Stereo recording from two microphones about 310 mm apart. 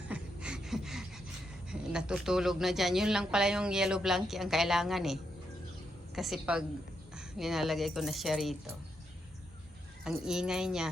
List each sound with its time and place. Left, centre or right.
0.1 s gasp: centre
1.7 s speech: centre
10.0 s speech: centre